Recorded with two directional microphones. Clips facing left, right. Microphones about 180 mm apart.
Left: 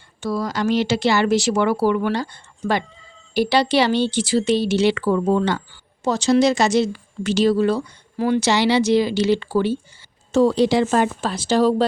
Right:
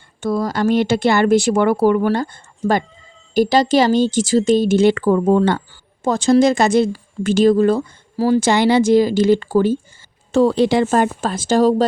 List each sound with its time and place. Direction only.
0.2 s speech: 50° right (ahead or behind)
8.1 s speech: 35° right (ahead or behind)
8.4 s speech: 50° right (ahead or behind)
10.3 s speech: 55° right (ahead or behind)